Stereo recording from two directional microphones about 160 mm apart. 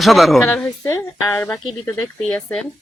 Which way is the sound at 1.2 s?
10° left (ahead or behind).